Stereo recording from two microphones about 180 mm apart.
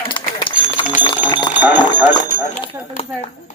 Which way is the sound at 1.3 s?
25° left (ahead or behind).